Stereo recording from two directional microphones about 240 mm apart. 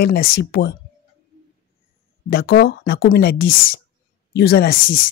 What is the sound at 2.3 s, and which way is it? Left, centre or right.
Speech, left.